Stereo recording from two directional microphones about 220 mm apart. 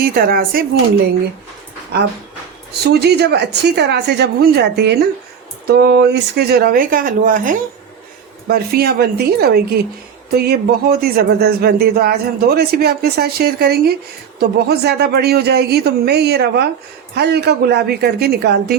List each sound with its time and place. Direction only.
0.0 s speech: 40° right (ahead or behind)
2.8 s speech: 50° right (ahead or behind)